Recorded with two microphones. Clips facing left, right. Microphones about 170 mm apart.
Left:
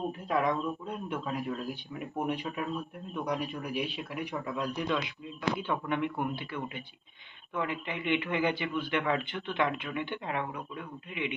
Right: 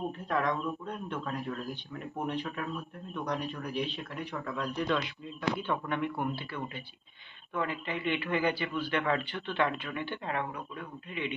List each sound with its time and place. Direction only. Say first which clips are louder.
0.3 s speech: left 2 dB; 10° left (ahead or behind)